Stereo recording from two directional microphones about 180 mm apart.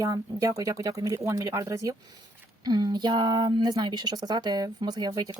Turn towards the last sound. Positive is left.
turn(degrees=-20)  # may be behind; listen again after turning